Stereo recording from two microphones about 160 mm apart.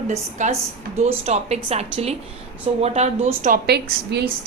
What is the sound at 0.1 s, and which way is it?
A woman's voice, 50° right (ahead or behind).